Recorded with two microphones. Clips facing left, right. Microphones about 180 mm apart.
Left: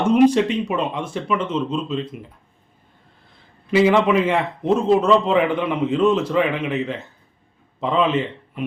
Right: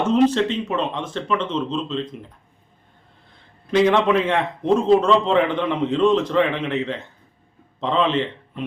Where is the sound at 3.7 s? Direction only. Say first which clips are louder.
Left 1 dB; 5° left (ahead or behind).